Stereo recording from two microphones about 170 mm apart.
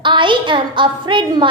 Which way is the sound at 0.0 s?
30° right (ahead or behind).